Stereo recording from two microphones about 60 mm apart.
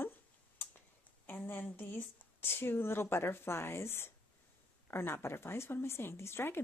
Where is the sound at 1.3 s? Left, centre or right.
Left.